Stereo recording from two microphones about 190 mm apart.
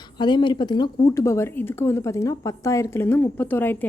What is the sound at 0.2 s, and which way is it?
A woman's voice, 25° left (ahead or behind).